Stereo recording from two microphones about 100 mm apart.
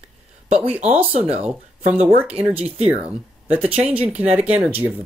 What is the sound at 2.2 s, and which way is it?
Speech, 15° right (ahead or behind).